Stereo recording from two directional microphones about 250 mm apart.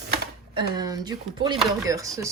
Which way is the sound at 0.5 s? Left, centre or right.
Centre.